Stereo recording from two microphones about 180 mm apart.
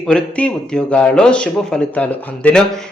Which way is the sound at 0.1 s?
5° left (ahead or behind).